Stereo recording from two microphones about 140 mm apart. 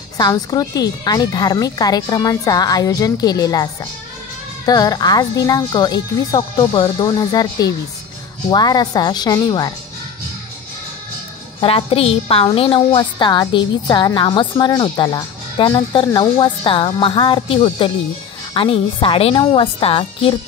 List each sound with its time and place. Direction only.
0.2 s speech: 25° left (ahead or behind)
4.6 s speech: 25° left (ahead or behind)
11.6 s a woman's voice: 40° left (ahead or behind)